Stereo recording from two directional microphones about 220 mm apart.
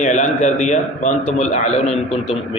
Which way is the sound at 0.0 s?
35° left (ahead or behind).